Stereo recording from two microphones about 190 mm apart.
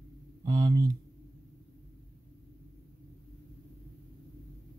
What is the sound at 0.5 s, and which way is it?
Speech, 20° right (ahead or behind).